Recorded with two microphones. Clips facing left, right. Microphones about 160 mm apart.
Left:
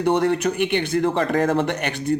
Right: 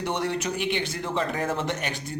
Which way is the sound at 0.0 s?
55° left (ahead or behind).